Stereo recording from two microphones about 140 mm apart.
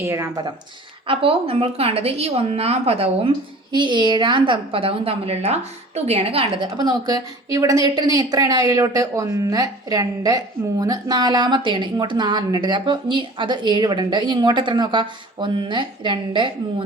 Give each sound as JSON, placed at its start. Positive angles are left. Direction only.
{"t": 0.0, "sound": "speech", "side_deg": -20}
{"t": 1.0, "sound": "a woman's voice", "side_deg": -40}